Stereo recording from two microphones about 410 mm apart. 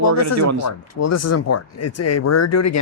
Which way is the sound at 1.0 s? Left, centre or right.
Left.